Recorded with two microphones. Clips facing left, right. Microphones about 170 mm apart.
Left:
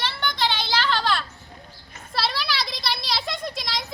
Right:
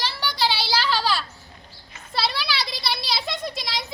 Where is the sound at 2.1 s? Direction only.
Centre (ahead or behind).